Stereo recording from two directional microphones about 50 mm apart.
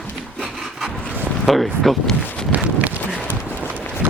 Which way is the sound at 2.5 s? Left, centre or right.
Right.